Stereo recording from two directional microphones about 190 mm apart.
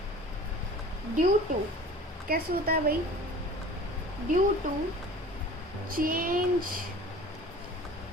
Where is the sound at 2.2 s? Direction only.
50° right (ahead or behind).